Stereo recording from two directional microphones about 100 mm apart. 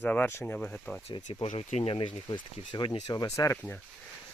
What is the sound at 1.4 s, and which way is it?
Speech, 90° left.